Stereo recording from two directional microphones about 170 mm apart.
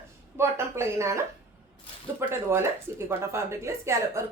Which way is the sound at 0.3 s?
15° right (ahead or behind).